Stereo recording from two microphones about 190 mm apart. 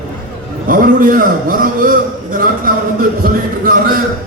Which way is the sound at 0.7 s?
45° right (ahead or behind).